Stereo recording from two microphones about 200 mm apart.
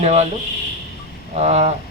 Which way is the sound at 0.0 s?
30° right (ahead or behind).